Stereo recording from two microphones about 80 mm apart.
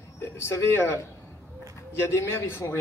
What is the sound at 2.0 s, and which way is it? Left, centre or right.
Speech, left.